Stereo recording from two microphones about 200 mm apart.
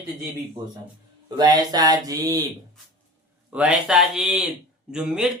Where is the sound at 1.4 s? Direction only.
20° right (ahead or behind).